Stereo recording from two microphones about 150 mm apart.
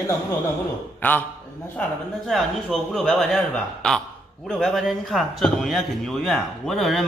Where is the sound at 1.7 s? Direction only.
Centre (ahead or behind).